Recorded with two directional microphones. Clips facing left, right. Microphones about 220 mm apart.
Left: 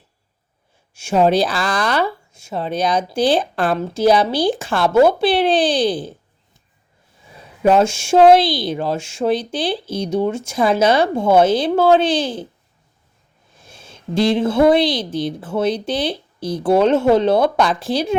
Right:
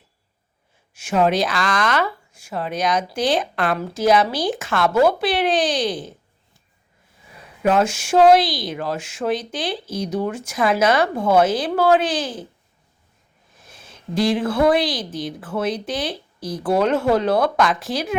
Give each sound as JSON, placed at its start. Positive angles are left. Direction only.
{"t": 0.9, "sound": "speech", "side_deg": 30}
{"t": 7.6, "sound": "speech", "side_deg": 25}
{"t": 13.6, "sound": "speech", "side_deg": 25}